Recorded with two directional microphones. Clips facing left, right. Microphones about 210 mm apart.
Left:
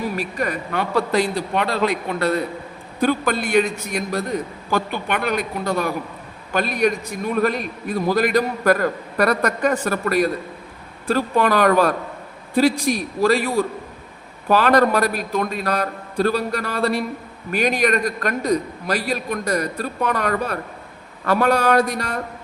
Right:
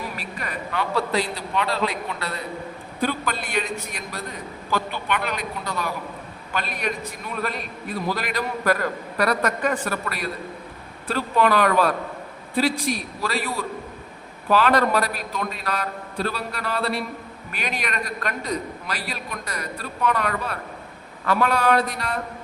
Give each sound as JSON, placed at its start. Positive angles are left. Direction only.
{"t": 0.2, "sound": "a man's voice", "side_deg": 45}